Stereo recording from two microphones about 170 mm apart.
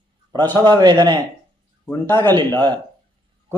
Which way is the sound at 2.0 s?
15° left (ahead or behind).